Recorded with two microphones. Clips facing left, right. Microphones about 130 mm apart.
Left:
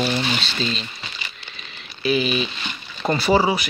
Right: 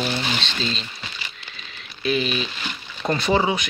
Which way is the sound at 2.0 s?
5° left (ahead or behind).